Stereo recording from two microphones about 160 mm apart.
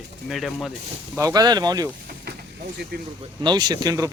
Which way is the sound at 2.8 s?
90° right.